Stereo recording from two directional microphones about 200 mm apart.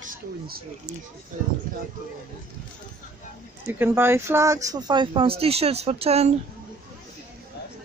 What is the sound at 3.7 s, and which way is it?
Speech, 10° right (ahead or behind).